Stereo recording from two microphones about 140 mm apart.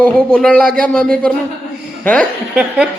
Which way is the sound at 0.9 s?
5° left (ahead or behind).